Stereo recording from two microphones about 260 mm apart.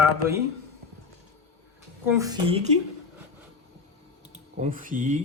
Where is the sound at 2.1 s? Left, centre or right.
Centre.